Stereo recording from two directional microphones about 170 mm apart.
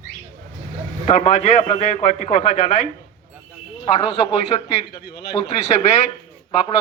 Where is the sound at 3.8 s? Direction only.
35° left (ahead or behind).